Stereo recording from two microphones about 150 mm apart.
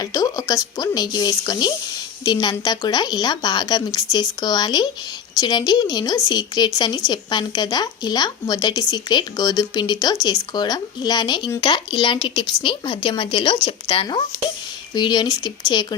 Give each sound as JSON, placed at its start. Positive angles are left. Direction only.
{"t": 0.0, "sound": "a woman's voice", "side_deg": 25}